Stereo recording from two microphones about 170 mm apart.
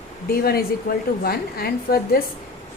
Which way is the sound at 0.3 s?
60° left (ahead or behind).